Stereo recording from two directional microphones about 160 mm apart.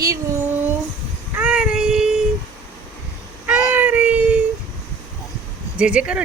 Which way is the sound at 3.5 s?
10° right (ahead or behind).